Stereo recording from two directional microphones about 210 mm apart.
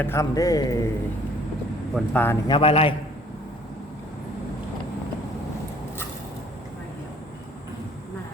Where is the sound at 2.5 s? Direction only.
25° left (ahead or behind).